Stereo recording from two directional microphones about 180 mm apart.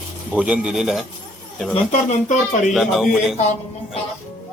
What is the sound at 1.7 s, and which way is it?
Speech, 40° left (ahead or behind).